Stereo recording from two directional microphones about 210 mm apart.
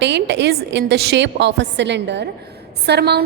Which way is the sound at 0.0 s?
55° right (ahead or behind).